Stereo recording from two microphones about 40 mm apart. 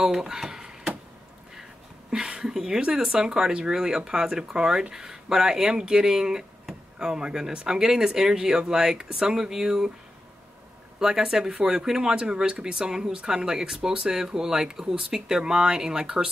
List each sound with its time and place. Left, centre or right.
0.0 s a sound: centre
2.2 s speech: right
11.0 s speech: centre